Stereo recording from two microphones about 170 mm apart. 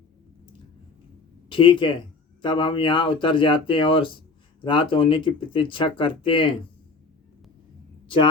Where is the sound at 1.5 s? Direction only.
30° left (ahead or behind).